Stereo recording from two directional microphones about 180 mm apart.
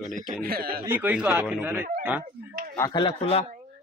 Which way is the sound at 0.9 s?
5° right (ahead or behind).